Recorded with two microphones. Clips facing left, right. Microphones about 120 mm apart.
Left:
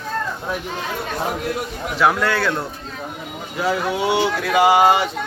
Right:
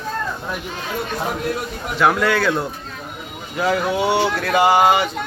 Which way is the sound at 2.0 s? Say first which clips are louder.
Right 1 dB; centre (ahead or behind).